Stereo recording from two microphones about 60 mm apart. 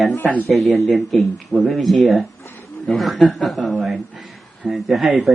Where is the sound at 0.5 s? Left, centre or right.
Centre.